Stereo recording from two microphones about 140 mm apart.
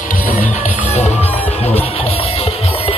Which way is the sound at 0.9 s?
50° left (ahead or behind).